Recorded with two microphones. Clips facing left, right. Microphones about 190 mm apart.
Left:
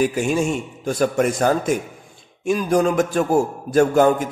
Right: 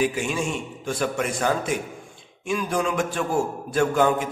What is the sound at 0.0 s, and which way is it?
A man's voice, 45° left (ahead or behind).